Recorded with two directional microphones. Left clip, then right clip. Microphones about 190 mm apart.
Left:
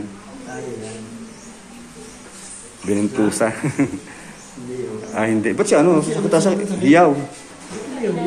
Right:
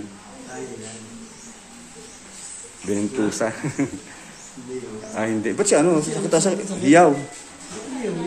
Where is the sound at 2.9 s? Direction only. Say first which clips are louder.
Left 4 dB; 10° right (ahead or behind).